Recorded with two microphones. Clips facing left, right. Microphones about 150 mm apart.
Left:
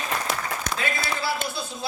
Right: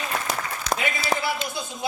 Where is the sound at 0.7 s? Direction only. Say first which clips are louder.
Right 4 dB; 50° left (ahead or behind).